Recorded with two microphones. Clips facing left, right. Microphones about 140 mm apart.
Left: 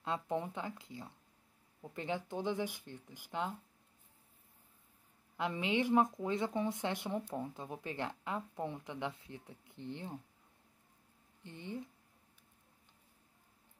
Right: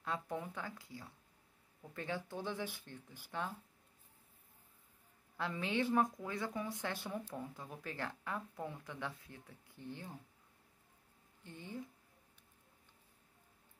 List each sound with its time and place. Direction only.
0.0 s speech: 25° left (ahead or behind)
5.4 s speech: 20° left (ahead or behind)
11.4 s speech: 20° left (ahead or behind)